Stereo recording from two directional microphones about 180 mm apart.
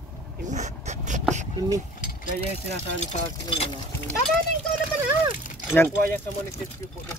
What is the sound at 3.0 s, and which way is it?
Speech, 40° left (ahead or behind).